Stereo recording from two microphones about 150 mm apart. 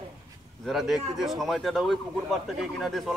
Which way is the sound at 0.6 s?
Centre (ahead or behind).